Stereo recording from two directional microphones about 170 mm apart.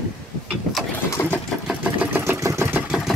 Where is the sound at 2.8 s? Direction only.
5° right (ahead or behind).